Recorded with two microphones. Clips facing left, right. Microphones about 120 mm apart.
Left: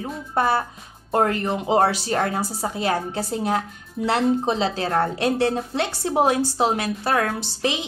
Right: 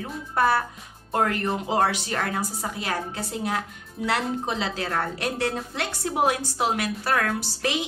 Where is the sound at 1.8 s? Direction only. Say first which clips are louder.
Left 5 dB; 35° left (ahead or behind).